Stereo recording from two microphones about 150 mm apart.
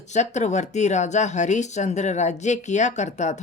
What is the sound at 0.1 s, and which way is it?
Speech, 50° left (ahead or behind).